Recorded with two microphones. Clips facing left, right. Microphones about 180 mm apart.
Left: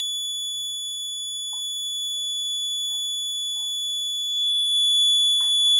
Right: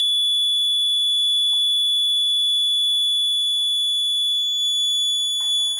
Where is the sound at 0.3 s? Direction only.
25° right (ahead or behind).